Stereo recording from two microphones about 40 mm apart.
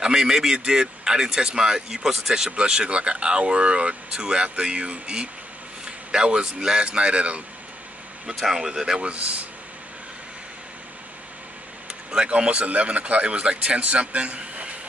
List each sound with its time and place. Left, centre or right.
0.0 s speech: centre
2.5 s speech: right
8.4 s speech: centre
9.0 s speech: right
11.9 s a sound: right
12.4 s speech: right